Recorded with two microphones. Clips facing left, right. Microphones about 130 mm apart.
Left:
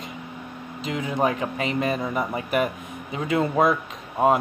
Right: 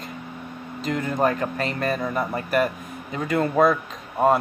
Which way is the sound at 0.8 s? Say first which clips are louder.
Right 1 dB; 5° left (ahead or behind).